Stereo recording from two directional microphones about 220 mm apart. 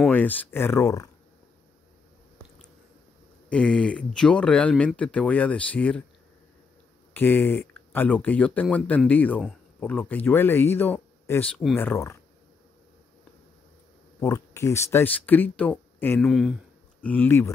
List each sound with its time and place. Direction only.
0.0 s speech: 10° left (ahead or behind)
3.4 s speech: 5° left (ahead or behind)
7.2 s speech: 10° left (ahead or behind)
14.2 s speech: 15° left (ahead or behind)